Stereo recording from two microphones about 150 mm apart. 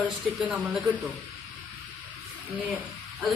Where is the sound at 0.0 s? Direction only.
10° right (ahead or behind).